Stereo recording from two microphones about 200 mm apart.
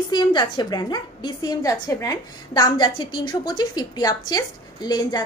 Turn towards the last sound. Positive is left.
turn(degrees=20)  # may be behind; listen again after turning